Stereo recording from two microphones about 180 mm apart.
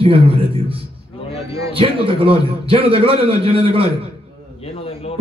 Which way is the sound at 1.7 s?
30° right (ahead or behind).